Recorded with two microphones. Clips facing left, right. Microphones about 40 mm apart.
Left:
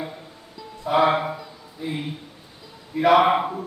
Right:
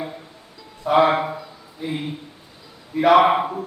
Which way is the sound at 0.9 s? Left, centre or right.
Centre.